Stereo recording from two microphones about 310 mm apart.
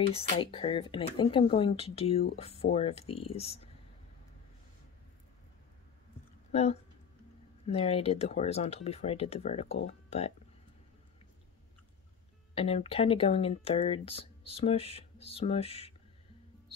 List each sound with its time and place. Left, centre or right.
0.1 s speech: centre
6.5 s speech: centre
12.5 s speech: centre